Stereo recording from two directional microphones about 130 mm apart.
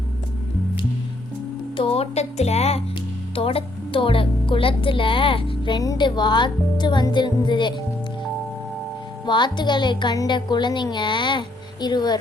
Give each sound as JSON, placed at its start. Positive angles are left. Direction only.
{"t": 1.7, "sound": "speech", "side_deg": 45}
{"t": 9.2, "sound": "speech", "side_deg": 35}